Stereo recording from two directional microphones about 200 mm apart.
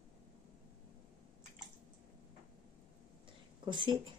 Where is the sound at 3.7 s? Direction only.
25° right (ahead or behind).